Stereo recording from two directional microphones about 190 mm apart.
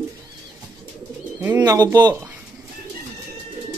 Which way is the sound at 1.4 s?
15° right (ahead or behind).